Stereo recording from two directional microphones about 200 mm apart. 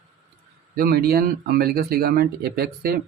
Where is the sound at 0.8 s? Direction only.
50° right (ahead or behind).